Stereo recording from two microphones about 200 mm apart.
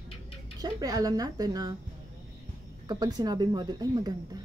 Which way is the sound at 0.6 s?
20° right (ahead or behind).